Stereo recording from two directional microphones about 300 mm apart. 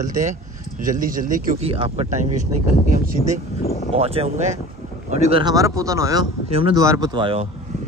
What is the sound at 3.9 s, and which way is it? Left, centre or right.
Speech, centre.